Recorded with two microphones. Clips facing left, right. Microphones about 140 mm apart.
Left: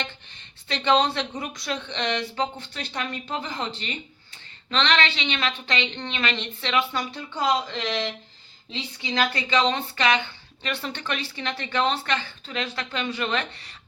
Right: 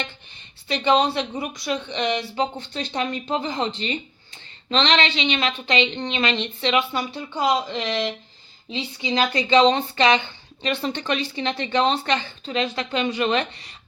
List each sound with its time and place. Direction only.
0.7 s a woman's voice: 5° right (ahead or behind)
2.6 s a woman's voice: 25° right (ahead or behind)